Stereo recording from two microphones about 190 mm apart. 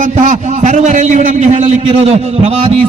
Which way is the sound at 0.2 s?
40° right (ahead or behind).